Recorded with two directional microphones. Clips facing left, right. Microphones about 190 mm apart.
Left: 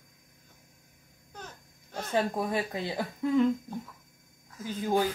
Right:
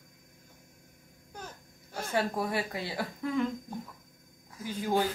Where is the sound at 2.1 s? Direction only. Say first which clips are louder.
Left 2 dB; 20° left (ahead or behind).